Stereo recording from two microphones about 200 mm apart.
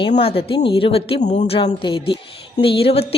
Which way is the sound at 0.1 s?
30° left (ahead or behind).